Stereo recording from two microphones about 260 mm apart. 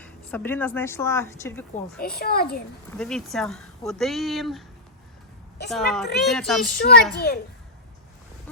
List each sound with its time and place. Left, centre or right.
0.0 s speech: centre
1.7 s a child's voice: left
3.0 s speech: centre
5.6 s speech: centre
6.7 s a child's voice: left